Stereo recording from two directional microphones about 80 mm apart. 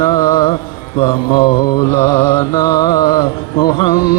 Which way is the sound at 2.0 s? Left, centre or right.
Left.